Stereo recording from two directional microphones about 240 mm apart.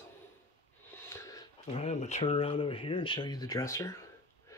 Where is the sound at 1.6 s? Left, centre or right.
Left; by 4.1 s centre.